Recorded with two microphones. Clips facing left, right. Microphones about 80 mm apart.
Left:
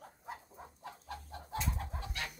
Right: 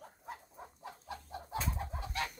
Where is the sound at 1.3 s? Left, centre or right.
Centre.